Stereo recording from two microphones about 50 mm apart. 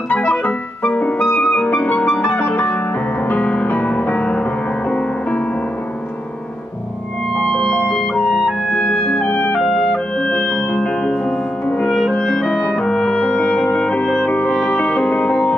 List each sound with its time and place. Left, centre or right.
0.1 s music: left
1.2 s clarinet: left
1.7 s music: left
2.0 s piano: left
7.8 s clarinet: centre
8.7 s clarinet: centre
9.2 s clarinet: left
9.6 s music: centre
10.2 s music: left
10.9 s music: centre
12.1 s clarinet: centre
12.7 s music: centre
13.2 s music: left